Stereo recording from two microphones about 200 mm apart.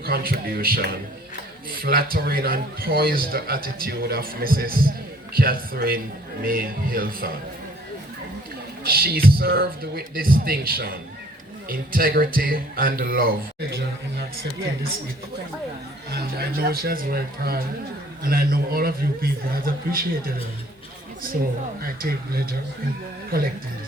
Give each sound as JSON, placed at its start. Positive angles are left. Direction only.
{"t": 0.0, "sound": "a man's voice", "side_deg": -50}
{"t": 8.8, "sound": "a man's voice", "side_deg": -50}
{"t": 16.1, "sound": "a man's voice", "side_deg": -50}
{"t": 21.8, "sound": "a man's voice", "side_deg": -50}